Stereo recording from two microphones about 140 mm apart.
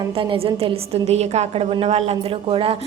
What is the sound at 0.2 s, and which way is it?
A woman's voice, 40° right (ahead or behind).